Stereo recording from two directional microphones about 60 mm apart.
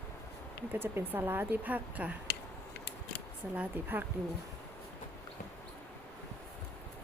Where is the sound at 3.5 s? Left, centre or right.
Right.